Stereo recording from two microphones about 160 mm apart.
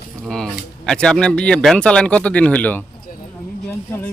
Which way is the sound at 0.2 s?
5° left (ahead or behind).